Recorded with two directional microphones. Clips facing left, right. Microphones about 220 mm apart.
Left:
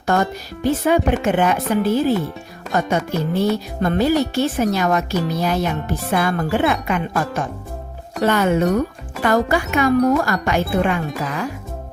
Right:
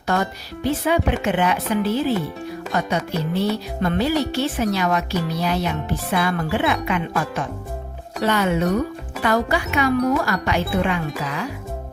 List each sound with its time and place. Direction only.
0.1 s speech: 45° left (ahead or behind)